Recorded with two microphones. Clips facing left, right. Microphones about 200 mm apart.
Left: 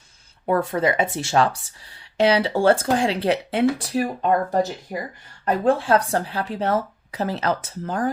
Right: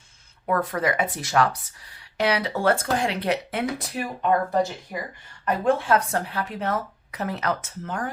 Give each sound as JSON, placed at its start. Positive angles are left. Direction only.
{"t": 0.4, "sound": "speech", "side_deg": 25}